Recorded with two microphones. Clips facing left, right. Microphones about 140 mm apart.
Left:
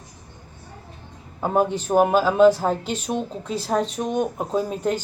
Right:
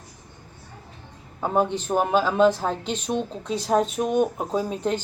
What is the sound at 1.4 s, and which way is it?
Speech, 10° left (ahead or behind).